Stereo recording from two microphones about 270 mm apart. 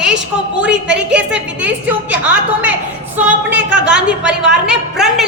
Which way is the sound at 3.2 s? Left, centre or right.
Centre.